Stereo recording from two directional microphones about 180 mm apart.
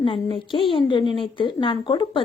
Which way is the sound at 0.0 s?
25° left (ahead or behind).